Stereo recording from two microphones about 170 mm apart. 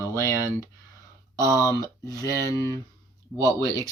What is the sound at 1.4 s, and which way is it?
Speech, 20° left (ahead or behind).